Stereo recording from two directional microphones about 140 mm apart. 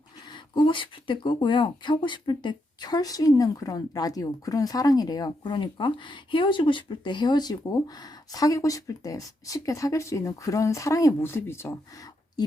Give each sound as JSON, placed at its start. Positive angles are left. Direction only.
{"t": 0.3, "sound": "speech", "side_deg": 35}